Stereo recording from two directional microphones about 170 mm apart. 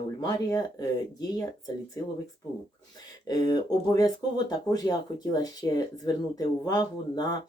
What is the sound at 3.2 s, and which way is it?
Speech, 25° left (ahead or behind).